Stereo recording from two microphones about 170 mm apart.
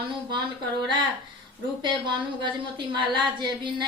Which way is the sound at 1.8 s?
25° right (ahead or behind).